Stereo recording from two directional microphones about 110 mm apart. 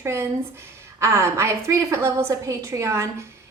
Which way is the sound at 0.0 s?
25° right (ahead or behind).